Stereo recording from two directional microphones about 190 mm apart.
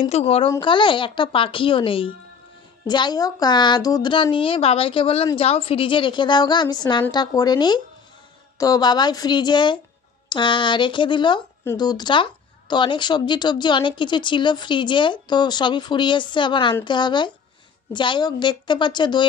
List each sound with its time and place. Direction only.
0.1 s a woman's voice: 30° left (ahead or behind)